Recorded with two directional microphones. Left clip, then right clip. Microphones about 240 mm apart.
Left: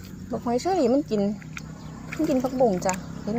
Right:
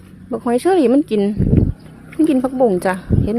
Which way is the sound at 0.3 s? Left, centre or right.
Right.